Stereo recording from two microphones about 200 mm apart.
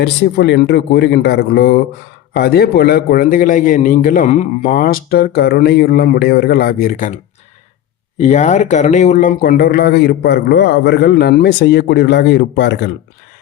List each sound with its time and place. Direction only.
0.0 s a man's voice: 60° left (ahead or behind); by 7.2 s 40° left (ahead or behind)
8.2 s a man's voice: 35° left (ahead or behind); by 12.9 s 60° left (ahead or behind)